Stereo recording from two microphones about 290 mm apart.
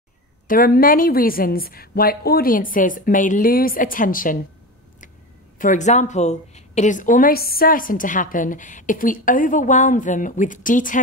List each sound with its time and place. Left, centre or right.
0.5 s a woman's voice: left
5.6 s a woman's voice: left